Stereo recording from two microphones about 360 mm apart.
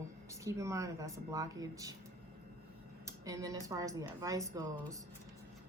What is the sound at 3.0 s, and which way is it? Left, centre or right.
A woman's voice, centre.